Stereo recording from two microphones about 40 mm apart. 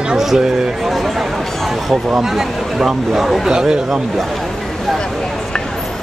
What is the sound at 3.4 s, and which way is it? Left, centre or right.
Speech, centre.